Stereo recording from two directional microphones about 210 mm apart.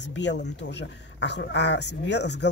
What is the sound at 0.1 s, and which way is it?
Speech, 55° left (ahead or behind).